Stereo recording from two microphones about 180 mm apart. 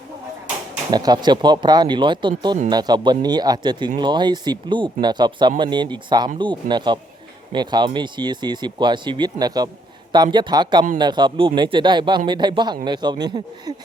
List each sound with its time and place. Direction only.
0.9 s speech: 25° right (ahead or behind)